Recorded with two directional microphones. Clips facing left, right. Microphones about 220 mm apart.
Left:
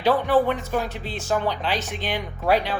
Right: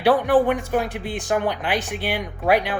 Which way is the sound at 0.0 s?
15° right (ahead or behind).